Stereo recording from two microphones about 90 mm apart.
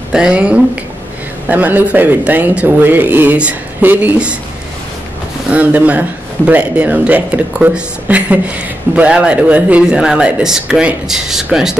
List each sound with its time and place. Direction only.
0.1 s speech: 10° right (ahead or behind)
5.5 s speech: 15° right (ahead or behind)